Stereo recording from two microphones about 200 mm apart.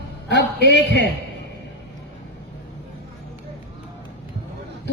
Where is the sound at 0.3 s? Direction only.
60° left (ahead or behind).